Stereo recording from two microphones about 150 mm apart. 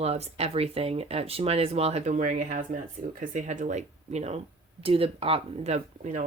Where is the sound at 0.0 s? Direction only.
45° right (ahead or behind).